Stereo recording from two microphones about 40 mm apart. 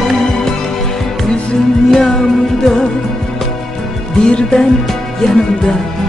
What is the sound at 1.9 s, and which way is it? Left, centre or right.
Music, centre.